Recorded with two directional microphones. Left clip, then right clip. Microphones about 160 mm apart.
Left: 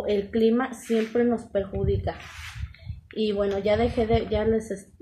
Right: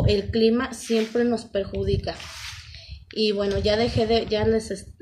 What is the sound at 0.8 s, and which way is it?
Speech, 30° right (ahead or behind).